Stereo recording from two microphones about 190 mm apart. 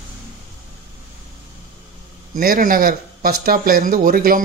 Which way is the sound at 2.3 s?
50° right (ahead or behind).